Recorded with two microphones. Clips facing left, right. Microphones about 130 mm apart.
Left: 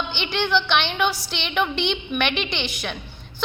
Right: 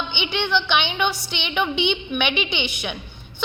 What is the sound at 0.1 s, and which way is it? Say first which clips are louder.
A woman's voice: left 1 dB; centre (ahead or behind).